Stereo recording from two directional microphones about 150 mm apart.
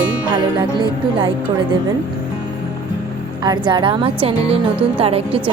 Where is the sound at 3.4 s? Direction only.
30° right (ahead or behind).